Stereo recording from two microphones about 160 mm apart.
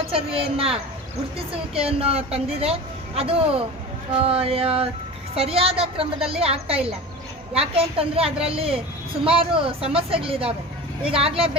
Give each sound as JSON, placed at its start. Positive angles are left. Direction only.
{"t": 0.1, "sound": "a woman's voice", "side_deg": -35}